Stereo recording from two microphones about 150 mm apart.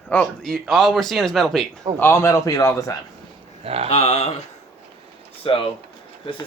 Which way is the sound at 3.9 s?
45° left (ahead or behind).